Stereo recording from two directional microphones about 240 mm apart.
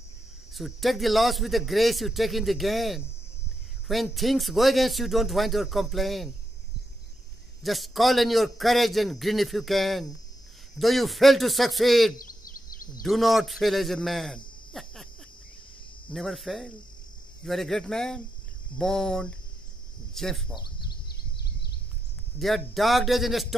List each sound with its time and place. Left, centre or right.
0.6 s speech: centre
7.6 s speech: centre
12.2 s a sound: left
13.0 s a man's voice: centre
16.1 s speech: centre
21.1 s a sound: left
22.4 s speech: centre